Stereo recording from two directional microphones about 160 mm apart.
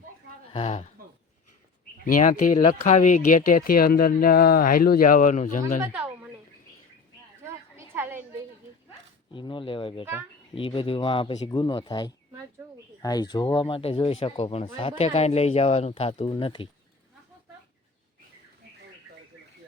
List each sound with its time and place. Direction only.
0.5 s speech: 40° left (ahead or behind)
2.1 s speech: 55° left (ahead or behind)
5.8 s speech: 10° right (ahead or behind)
7.4 s a sound: 15° right (ahead or behind)
9.3 s a sound: 30° left (ahead or behind)
10.5 s speech: 35° left (ahead or behind)